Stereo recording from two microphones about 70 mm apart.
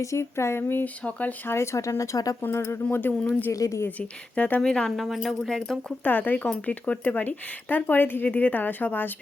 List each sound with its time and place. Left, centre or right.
0.0 s speech: left
1.0 s speech: left
1.5 s speech: left
2.4 s speech: left
3.5 s speech: left
3.8 s speech: left
4.6 s speech: centre
4.9 s speech: centre
6.0 s speech: left